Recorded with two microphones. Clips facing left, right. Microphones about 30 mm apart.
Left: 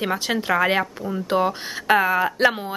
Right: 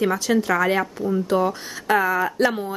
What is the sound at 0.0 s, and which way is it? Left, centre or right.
Speech, left.